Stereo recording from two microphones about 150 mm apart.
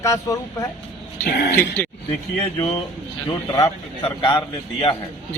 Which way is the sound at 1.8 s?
10° left (ahead or behind).